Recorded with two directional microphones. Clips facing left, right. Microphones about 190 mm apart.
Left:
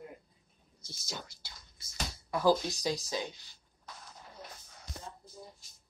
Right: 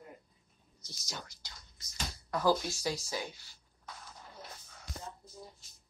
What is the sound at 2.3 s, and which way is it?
Speech, 15° left (ahead or behind).